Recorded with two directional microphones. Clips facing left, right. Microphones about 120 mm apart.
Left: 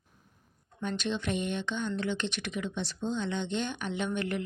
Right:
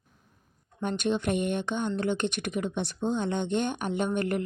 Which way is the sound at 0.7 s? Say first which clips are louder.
Right 5 dB; 50° right (ahead or behind).